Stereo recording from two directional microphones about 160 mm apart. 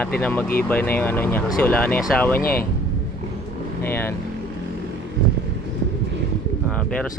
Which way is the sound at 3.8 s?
15° left (ahead or behind).